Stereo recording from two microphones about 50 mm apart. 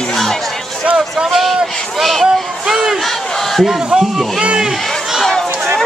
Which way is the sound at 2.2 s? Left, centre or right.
Centre.